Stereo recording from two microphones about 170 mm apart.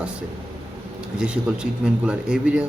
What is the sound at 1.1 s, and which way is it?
A man's voice, 5° right (ahead or behind).